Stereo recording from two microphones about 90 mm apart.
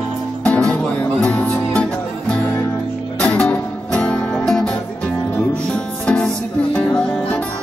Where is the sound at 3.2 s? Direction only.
15° left (ahead or behind).